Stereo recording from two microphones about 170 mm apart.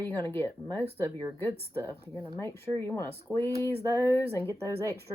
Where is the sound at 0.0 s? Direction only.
15° left (ahead or behind).